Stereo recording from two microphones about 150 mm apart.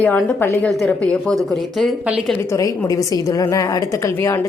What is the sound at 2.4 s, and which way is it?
A woman's voice, 20° left (ahead or behind).